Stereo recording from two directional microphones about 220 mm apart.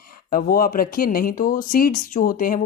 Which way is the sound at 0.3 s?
40° left (ahead or behind).